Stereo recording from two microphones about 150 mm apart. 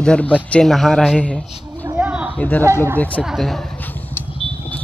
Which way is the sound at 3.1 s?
Centre (ahead or behind).